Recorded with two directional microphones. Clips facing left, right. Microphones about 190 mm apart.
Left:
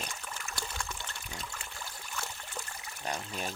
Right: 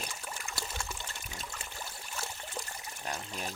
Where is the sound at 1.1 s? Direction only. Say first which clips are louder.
Left 1 dB; 15° right (ahead or behind).